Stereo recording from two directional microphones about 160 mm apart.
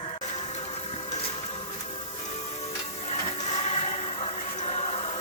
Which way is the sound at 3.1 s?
45° left (ahead or behind).